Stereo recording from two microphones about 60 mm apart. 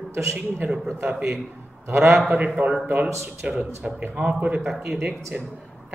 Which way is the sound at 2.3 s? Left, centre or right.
Right.